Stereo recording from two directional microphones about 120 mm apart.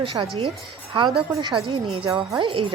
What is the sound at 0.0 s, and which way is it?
Speech, 45° right (ahead or behind).